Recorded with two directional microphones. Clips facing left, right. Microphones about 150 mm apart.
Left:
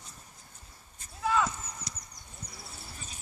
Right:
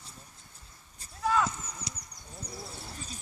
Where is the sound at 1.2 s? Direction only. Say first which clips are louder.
Right 1 dB; centre (ahead or behind).